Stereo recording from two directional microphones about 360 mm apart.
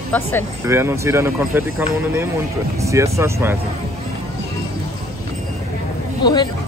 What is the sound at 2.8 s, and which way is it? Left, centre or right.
Speech, centre.